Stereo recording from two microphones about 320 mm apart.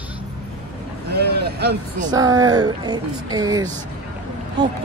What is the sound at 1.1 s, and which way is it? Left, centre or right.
Speech, right.